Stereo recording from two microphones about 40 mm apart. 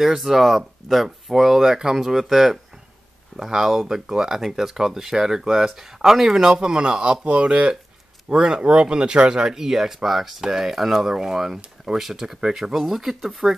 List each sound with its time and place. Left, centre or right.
0.0 s speech: centre